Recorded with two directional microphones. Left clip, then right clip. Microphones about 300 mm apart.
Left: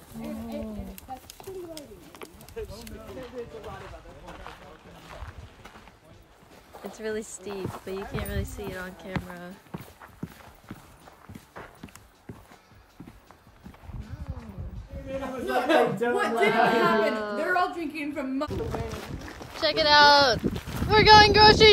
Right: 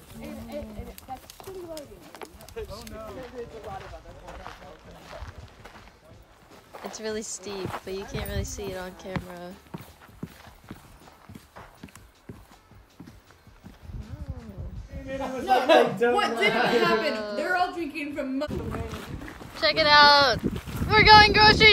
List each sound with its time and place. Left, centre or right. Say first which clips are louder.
0.2 s music: left 1 dB; centre
1.8 s a sound: right 2 dB; right
3.1 s speech: left 3 dB; right
6.9 s speech: even; centre
15.4 s speech: right 4 dB; centre
19.5 s speech: right 1 dB; centre